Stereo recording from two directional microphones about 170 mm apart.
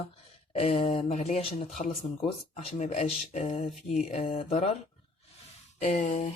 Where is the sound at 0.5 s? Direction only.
35° left (ahead or behind).